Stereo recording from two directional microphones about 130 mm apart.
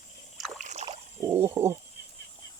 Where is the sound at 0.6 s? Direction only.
65° right (ahead or behind).